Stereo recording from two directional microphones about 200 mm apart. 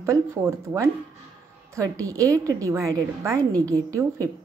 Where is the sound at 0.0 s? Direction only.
15° right (ahead or behind).